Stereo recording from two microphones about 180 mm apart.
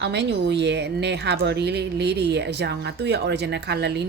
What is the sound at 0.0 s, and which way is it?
A woman's voice, 70° right (ahead or behind).